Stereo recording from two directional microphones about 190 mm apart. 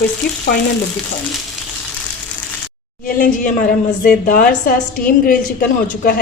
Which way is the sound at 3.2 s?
45° left (ahead or behind).